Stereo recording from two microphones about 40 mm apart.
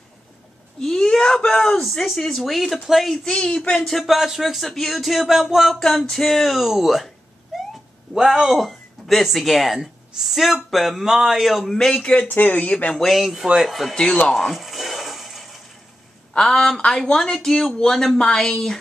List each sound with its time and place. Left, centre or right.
0.7 s whimper: centre
1.8 s speech: centre
3.3 s speech: left
3.7 s speech: centre
6.0 s speech: centre
7.5 s a sound: centre
8.1 s speech: centre
11.6 s speech: centre
11.9 s speech: left
12.2 s speech: left
12.9 s speech: centre
14.3 s a sound: centre
16.3 s speech: centre